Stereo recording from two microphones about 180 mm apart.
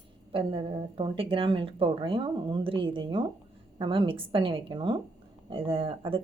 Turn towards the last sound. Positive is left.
turn(degrees=-30)  # may be behind; listen again after turning